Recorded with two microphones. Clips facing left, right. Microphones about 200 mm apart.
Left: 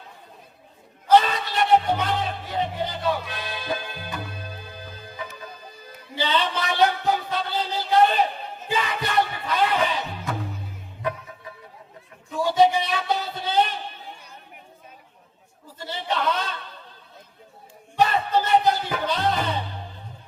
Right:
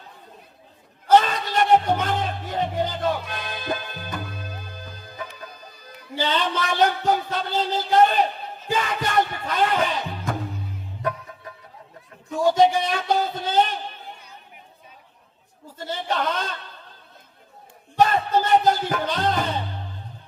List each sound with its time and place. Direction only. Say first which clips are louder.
1.1 s music: right 1 dB; 45° right (ahead or behind)
6.1 s speech: right 1 dB; 45° right (ahead or behind)
8.7 s music: right 1 dB; 45° right (ahead or behind)
12.3 s a sound: right 1 dB; 45° right (ahead or behind)
15.8 s a sound: right 1 dB; 45° right (ahead or behind)
18.0 s music: right 2 dB; 45° right (ahead or behind)